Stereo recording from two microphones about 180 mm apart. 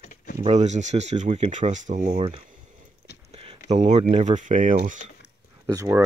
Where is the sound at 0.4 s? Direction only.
40° right (ahead or behind).